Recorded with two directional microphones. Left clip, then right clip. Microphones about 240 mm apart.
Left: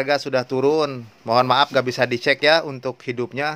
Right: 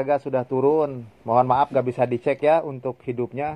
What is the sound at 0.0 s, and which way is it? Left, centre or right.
Speech, centre.